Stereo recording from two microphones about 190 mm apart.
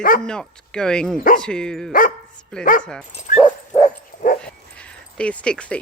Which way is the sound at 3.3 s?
45° left (ahead or behind).